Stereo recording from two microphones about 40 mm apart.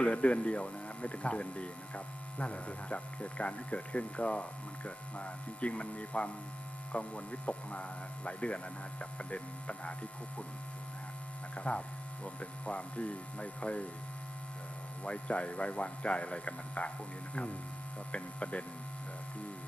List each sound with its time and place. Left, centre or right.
0.0 s speech: left
11.5 s speech: left
15.0 s speech: left
18.1 s speech: left